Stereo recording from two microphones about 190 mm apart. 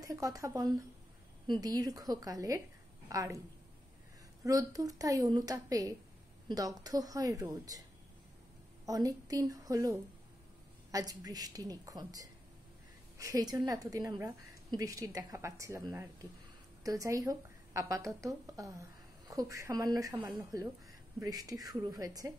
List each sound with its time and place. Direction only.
0.0 s a woman's voice: 20° right (ahead or behind)
4.5 s a woman's voice: 20° right (ahead or behind)
8.8 s a woman's voice: 20° right (ahead or behind)